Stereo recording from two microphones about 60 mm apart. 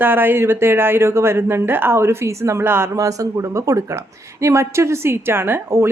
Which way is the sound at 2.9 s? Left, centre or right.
Right.